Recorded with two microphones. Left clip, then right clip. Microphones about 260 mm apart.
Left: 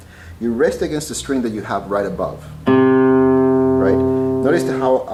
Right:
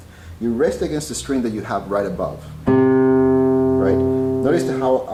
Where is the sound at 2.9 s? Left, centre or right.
Centre.